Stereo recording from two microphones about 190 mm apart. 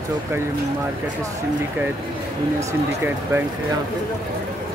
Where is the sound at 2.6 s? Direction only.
15° right (ahead or behind).